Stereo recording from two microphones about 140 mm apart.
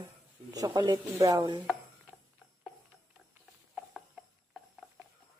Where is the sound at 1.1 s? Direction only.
25° right (ahead or behind).